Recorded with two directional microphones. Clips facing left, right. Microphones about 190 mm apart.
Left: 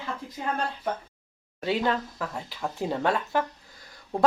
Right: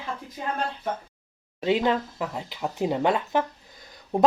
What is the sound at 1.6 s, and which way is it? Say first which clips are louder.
Speech: right 3 dB; 20° right (ahead or behind).